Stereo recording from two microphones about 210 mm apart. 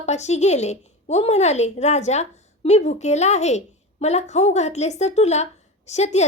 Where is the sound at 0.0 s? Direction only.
30° left (ahead or behind).